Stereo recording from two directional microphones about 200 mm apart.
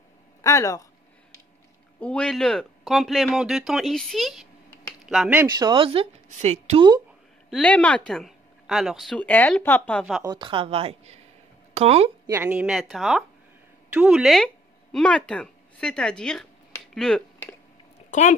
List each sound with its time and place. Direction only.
0.4 s speech: 15° left (ahead or behind)
2.0 s speech: 5° left (ahead or behind)
5.4 s a woman's voice: 20° right (ahead or behind)
7.4 s speech: 5° left (ahead or behind)
10.2 s a woman's voice: 25° right (ahead or behind)
12.3 s speech: 10° right (ahead or behind); by 17.6 s 5° left (ahead or behind)
18.1 s speech: 40° left (ahead or behind)